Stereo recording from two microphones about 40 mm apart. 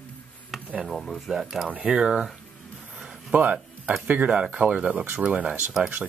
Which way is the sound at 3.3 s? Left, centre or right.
Right.